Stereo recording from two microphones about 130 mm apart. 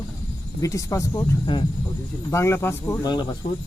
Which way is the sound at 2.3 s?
20° left (ahead or behind).